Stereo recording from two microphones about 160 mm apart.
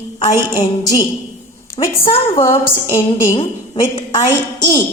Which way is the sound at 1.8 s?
35° left (ahead or behind).